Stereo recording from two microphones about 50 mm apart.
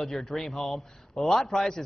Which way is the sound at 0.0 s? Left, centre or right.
Centre.